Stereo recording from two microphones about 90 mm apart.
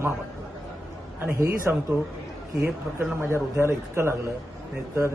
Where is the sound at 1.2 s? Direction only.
25° right (ahead or behind).